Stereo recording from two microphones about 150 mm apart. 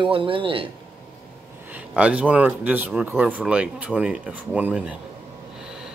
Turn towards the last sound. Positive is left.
turn(degrees=-10)  # may be behind; listen again after turning